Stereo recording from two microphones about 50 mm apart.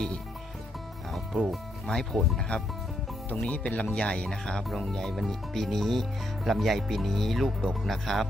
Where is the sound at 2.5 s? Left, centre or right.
Left; by 8.3 s centre.